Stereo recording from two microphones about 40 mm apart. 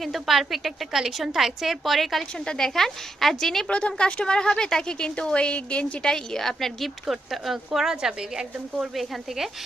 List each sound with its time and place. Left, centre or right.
0.0 s a woman's voice: centre
2.5 s a woman's voice: centre
3.7 s speech: left
6.0 s a woman's voice: centre
6.5 s a woman's voice: centre